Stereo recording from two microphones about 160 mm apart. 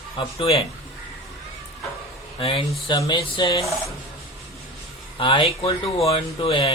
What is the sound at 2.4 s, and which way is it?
Speech, 35° left (ahead or behind).